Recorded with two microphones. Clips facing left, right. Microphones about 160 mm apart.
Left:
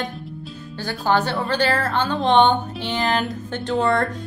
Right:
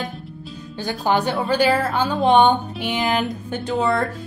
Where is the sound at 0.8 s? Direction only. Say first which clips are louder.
Even; 15° right (ahead or behind).